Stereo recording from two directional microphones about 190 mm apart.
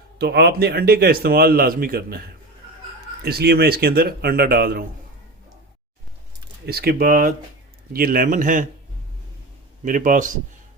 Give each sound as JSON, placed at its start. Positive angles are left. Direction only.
{"t": 0.2, "sound": "a man's voice", "side_deg": -60}
{"t": 3.2, "sound": "a man's voice", "side_deg": -55}
{"t": 6.7, "sound": "a man's voice", "side_deg": -55}
{"t": 9.8, "sound": "a man's voice", "side_deg": -45}